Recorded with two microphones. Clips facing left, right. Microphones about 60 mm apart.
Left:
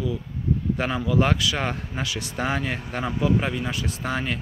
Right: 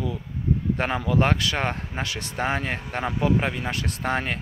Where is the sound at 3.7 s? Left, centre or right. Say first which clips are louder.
Even; right.